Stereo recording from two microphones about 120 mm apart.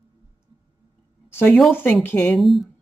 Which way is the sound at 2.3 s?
Centre (ahead or behind).